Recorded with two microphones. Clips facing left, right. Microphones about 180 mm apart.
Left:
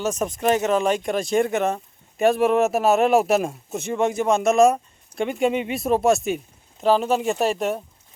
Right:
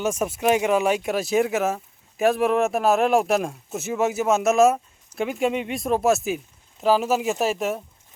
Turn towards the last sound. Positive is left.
turn(degrees=0)  # may be behind; listen again after turning